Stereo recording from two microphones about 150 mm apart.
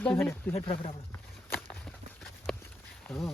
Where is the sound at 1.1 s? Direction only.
10° left (ahead or behind).